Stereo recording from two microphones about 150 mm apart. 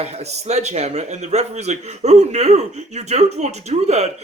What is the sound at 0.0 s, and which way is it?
A man's voice, 45° right (ahead or behind).